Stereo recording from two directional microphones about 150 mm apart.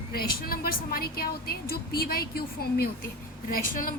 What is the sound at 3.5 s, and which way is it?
Speech, 70° left (ahead or behind).